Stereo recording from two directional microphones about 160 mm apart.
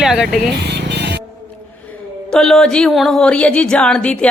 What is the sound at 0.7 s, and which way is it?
Music, 90° right.